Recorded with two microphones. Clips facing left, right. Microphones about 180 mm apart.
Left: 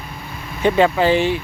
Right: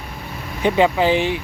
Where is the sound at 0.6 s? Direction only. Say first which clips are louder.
Left 1 dB; 15° right (ahead or behind).